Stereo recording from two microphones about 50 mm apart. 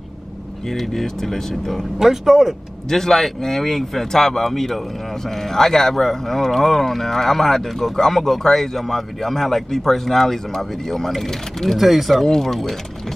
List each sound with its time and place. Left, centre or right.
0.7 s speech: centre
2.0 s speech: centre
2.9 s speech: centre